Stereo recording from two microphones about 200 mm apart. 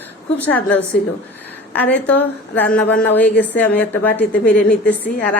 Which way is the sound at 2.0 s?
10° left (ahead or behind).